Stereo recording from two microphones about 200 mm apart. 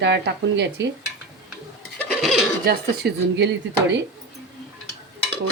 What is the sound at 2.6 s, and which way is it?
Speech, 55° right (ahead or behind).